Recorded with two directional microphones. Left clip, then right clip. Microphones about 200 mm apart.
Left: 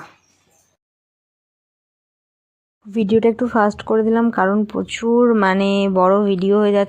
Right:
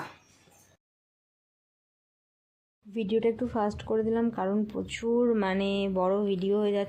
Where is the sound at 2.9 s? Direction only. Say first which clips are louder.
Left 11 dB; 30° left (ahead or behind).